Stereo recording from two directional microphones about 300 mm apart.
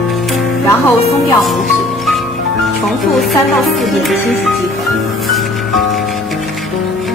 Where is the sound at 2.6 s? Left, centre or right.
Centre.